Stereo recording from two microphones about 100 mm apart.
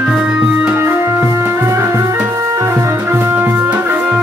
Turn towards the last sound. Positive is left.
turn(degrees=-20)  # may be behind; listen again after turning